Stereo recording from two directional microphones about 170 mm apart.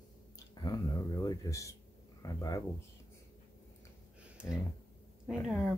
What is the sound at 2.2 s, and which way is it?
Speech, 20° left (ahead or behind).